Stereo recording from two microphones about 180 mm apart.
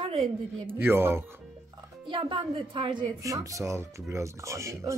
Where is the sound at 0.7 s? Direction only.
10° right (ahead or behind).